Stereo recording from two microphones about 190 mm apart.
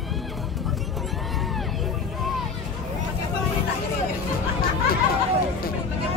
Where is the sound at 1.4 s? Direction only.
Centre (ahead or behind).